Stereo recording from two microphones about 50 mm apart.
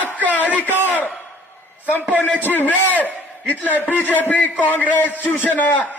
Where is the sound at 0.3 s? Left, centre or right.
Left.